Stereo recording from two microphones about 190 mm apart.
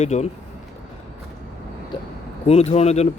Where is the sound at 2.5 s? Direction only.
35° left (ahead or behind).